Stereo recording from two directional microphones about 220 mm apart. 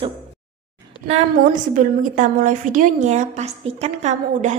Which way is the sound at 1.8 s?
35° right (ahead or behind).